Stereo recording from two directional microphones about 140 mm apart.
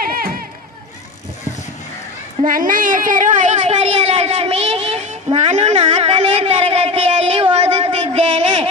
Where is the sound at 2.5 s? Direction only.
75° right (ahead or behind).